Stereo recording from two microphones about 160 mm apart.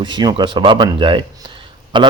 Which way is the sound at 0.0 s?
30° right (ahead or behind).